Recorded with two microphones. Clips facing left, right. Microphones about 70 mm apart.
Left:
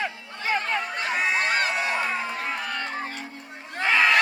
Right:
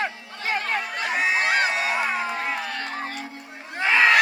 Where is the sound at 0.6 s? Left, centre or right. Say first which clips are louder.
Right 1 dB; left.